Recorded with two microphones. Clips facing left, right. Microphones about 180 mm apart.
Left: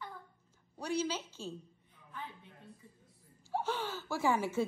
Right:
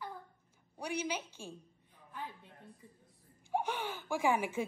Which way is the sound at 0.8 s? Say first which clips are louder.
Left 2 dB; 15° right (ahead or behind).